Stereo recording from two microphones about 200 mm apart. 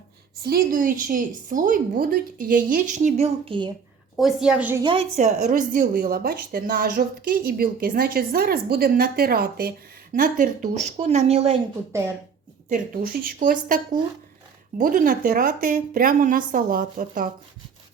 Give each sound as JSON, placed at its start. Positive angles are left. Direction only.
{"t": 0.4, "sound": "a woman's voice", "side_deg": -45}
{"t": 4.2, "sound": "a woman's voice", "side_deg": 0}
{"t": 4.8, "sound": "a woman's voice", "side_deg": -25}
{"t": 5.1, "sound": "a woman's voice", "side_deg": -35}
{"t": 11.9, "sound": "speech", "side_deg": -15}
{"t": 12.6, "sound": "a woman's voice", "side_deg": -45}